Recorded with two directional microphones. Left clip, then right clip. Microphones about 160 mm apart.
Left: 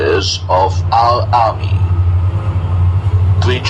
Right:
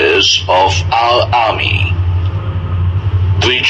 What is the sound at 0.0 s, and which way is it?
Speech, 25° right (ahead or behind).